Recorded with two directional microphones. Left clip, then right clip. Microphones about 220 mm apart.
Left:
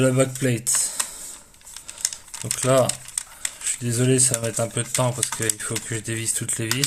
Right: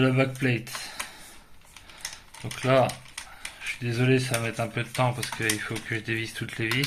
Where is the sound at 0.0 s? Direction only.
45° left (ahead or behind).